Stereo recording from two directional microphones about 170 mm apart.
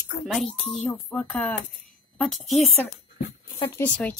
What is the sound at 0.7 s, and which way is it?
Speech, 10° left (ahead or behind).